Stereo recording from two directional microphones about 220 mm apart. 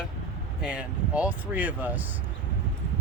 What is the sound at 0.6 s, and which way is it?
Speech, 5° right (ahead or behind).